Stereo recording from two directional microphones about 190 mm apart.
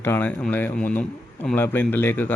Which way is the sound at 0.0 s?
10° left (ahead or behind).